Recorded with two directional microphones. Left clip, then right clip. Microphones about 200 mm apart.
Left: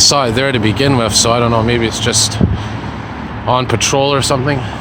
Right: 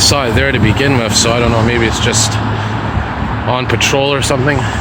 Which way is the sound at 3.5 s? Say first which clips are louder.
Even; 25° left (ahead or behind).